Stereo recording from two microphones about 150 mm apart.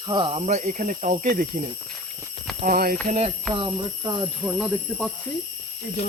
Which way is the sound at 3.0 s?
45° right (ahead or behind).